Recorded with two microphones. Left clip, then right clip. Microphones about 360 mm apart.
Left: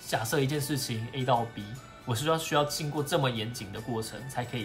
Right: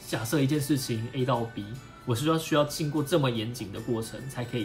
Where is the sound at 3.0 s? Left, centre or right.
Centre.